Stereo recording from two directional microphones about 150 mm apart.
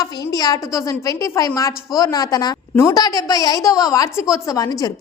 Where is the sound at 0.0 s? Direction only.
25° left (ahead or behind).